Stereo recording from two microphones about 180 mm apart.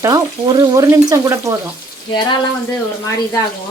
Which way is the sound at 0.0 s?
20° right (ahead or behind).